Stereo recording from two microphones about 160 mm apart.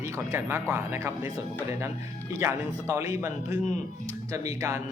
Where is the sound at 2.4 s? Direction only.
20° right (ahead or behind).